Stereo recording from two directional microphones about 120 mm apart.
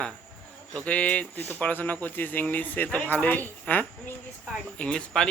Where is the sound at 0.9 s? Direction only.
10° left (ahead or behind).